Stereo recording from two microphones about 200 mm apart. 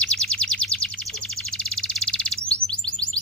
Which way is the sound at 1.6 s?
5° left (ahead or behind).